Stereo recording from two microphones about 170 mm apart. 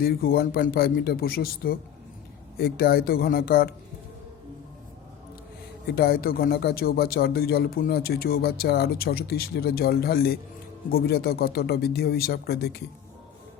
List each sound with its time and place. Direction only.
0.0 s speech: 60° left (ahead or behind)
5.8 s speech: 65° left (ahead or behind)